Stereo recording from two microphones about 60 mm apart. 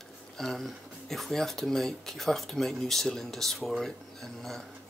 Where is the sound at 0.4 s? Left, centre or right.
Centre.